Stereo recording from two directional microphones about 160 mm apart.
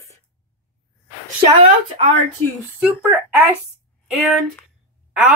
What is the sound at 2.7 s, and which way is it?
Speech, 10° right (ahead or behind).